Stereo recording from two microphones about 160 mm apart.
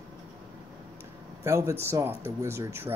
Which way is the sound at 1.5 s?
20° right (ahead or behind).